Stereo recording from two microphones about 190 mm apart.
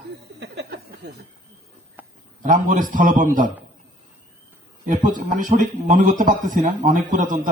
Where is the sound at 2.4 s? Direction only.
45° right (ahead or behind).